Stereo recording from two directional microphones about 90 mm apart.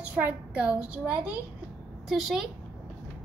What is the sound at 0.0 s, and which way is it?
A child's voice, 15° right (ahead or behind).